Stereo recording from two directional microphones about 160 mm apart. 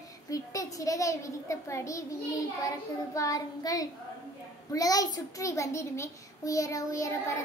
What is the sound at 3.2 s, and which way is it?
A woman's voice, 20° left (ahead or behind).